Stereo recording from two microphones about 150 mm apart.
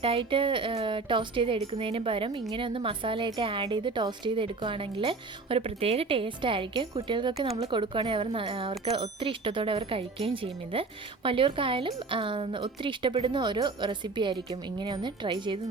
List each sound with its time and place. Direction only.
0.0 s speech: 35° right (ahead or behind)